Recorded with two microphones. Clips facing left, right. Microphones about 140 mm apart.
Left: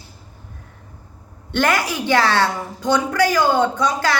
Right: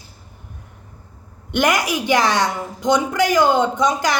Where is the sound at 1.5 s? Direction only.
15° right (ahead or behind).